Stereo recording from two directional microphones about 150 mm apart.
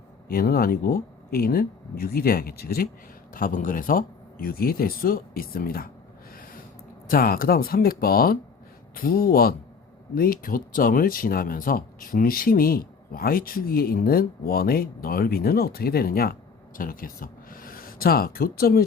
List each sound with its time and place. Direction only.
0.3 s speech: 85° left
3.3 s speech: 65° left (ahead or behind)
7.1 s speech: 75° left (ahead or behind)
10.2 s speech: 75° left (ahead or behind); by 18.9 s 90° left